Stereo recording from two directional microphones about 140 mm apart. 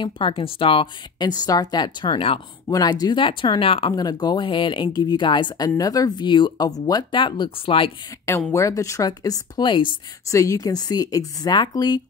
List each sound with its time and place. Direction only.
0.0 s speech: 40° left (ahead or behind)
2.7 s speech: 30° left (ahead or behind)
3.9 s speech: 30° left (ahead or behind)
8.5 s speech: 20° left (ahead or behind)
10.2 s speech: 25° left (ahead or behind)